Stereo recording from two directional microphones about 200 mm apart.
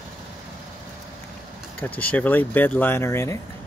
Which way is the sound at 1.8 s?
10° left (ahead or behind).